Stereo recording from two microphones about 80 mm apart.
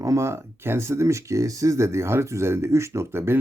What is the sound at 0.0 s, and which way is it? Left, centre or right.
Speech, right.